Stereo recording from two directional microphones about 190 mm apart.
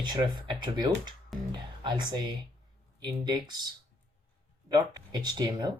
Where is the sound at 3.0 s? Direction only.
20° right (ahead or behind).